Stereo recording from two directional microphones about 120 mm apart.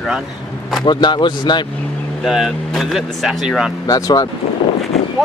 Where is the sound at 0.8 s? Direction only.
40° left (ahead or behind).